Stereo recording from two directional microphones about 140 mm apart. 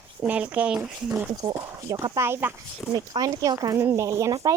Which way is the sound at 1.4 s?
25° right (ahead or behind).